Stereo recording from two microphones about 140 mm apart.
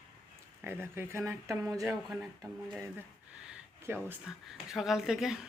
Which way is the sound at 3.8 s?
15° right (ahead or behind).